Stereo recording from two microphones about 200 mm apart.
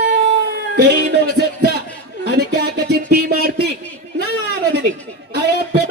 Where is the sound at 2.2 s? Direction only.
55° right (ahead or behind).